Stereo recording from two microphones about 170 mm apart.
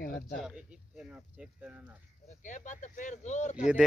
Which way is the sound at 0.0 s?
55° left (ahead or behind).